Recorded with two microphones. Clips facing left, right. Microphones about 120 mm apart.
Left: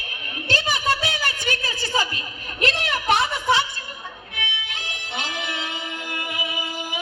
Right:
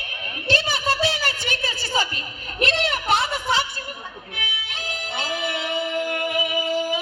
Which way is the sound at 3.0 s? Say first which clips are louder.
Left 5 dB; 20° left (ahead or behind).